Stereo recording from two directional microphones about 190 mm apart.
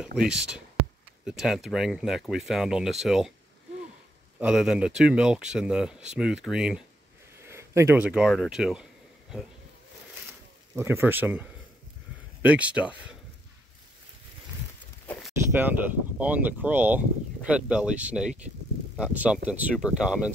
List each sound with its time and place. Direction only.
0.1 s speech: 60° right (ahead or behind)
1.2 s speech: centre (ahead or behind)
4.4 s speech: 5° right (ahead or behind)
10.8 s speech: 10° right (ahead or behind)
15.0 s a sound: 5° left (ahead or behind)
16.2 s speech: 10° right (ahead or behind)